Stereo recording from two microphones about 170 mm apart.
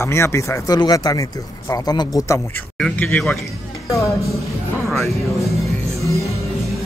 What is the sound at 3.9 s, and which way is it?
Speech, 20° left (ahead or behind).